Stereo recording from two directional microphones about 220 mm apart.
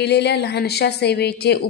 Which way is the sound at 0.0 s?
50° left (ahead or behind).